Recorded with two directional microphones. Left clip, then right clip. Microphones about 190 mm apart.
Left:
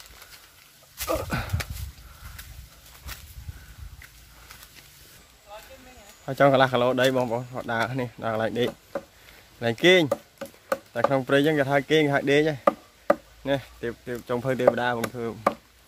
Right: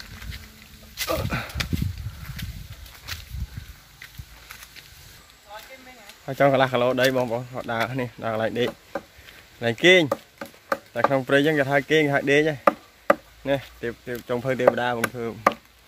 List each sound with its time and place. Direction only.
0.9 s a sound: 5° left (ahead or behind)
6.2 s speech: 10° left (ahead or behind)
10.0 s chop: 25° left (ahead or behind)
10.9 s speech: centre (ahead or behind)